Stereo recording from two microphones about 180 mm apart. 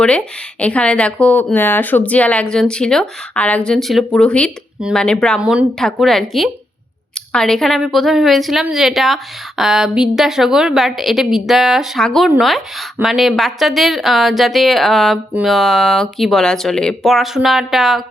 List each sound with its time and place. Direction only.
0.0 s a woman's voice: 5° left (ahead or behind)